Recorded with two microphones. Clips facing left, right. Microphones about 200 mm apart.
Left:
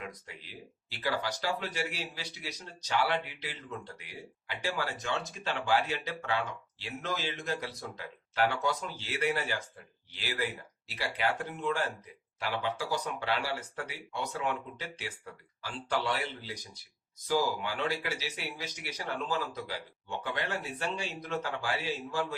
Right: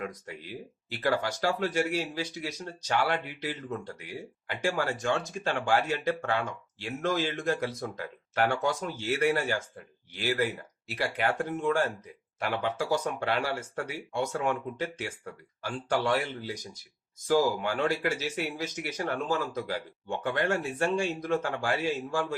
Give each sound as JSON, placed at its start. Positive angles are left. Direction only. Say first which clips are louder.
{"t": 0.0, "sound": "speech", "louder": "right 7 dB", "side_deg": -45}